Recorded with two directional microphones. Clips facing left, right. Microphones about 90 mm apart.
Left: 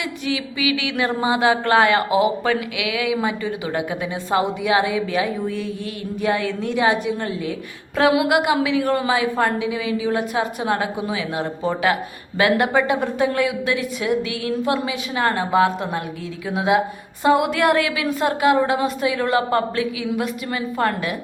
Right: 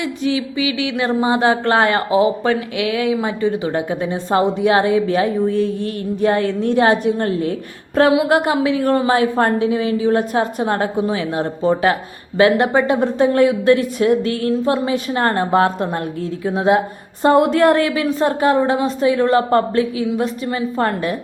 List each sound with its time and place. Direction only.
0.3 s speech: 25° right (ahead or behind)